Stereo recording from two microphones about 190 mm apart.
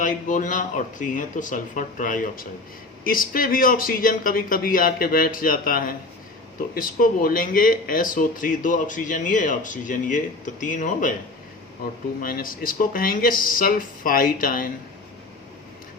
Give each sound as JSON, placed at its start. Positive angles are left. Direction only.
{"t": 0.0, "sound": "speech", "side_deg": 45}
{"t": 12.2, "sound": "speech", "side_deg": 50}